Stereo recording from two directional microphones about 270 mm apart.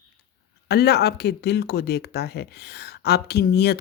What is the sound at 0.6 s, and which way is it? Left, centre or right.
Speech, left.